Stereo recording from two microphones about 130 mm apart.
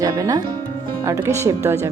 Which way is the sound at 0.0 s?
25° right (ahead or behind).